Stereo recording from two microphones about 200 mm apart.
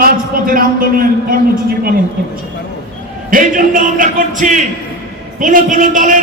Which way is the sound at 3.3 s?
40° right (ahead or behind).